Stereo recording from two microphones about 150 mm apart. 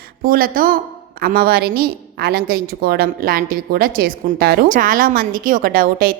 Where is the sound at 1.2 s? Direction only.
90° right.